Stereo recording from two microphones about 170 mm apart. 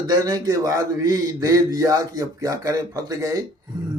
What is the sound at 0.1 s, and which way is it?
A man's voice, 20° right (ahead or behind).